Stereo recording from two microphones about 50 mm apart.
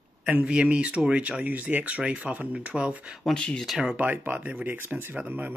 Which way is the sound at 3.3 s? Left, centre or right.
Centre.